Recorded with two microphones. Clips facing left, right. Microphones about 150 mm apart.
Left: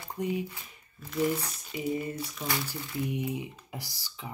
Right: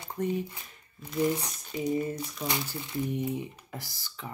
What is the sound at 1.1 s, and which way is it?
Speech, 15° right (ahead or behind).